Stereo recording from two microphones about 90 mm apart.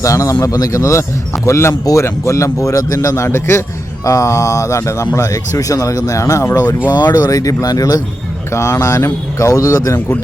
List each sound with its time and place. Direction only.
0.0 s speech: 35° left (ahead or behind)